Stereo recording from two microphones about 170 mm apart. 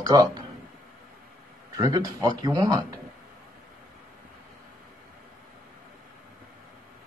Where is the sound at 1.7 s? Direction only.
25° right (ahead or behind).